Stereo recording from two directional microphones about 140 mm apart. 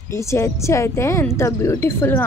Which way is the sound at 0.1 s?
20° left (ahead or behind).